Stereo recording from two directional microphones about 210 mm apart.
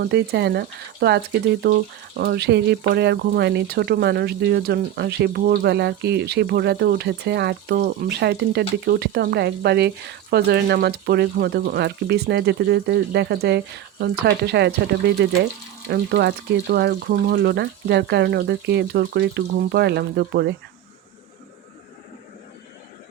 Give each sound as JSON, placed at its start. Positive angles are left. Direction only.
{"t": 0.0, "sound": "speech", "side_deg": -50}